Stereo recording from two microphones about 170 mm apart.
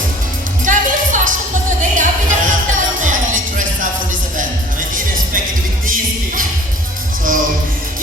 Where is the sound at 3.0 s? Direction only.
50° right (ahead or behind).